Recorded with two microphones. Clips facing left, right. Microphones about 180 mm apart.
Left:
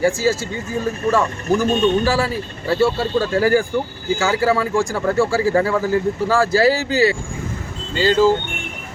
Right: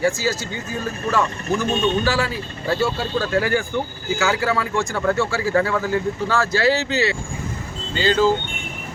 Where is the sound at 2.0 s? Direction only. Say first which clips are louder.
Left 3 dB; 30° left (ahead or behind).